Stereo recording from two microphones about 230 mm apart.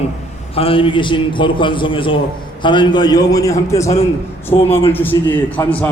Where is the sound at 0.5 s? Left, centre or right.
Left; by 5.9 s centre.